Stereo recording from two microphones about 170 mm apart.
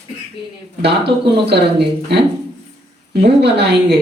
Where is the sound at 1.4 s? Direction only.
75° right (ahead or behind).